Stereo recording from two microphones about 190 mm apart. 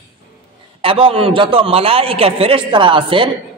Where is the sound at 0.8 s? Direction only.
30° right (ahead or behind).